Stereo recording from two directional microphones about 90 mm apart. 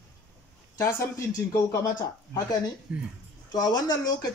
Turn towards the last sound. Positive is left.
turn(degrees=50)  # may be behind; listen again after turning